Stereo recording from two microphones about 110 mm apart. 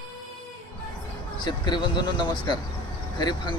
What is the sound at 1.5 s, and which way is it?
Speech, 40° left (ahead or behind).